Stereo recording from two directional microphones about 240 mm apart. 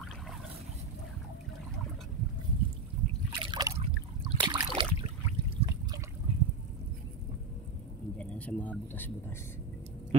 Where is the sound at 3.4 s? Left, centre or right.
Right.